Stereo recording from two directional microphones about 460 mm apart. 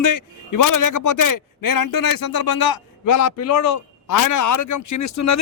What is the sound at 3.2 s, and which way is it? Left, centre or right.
A man's voice, left.